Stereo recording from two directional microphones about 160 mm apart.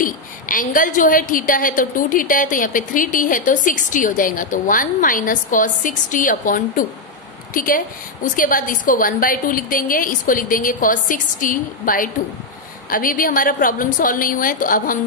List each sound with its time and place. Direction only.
0.0 s a woman's voice: 60° left (ahead or behind)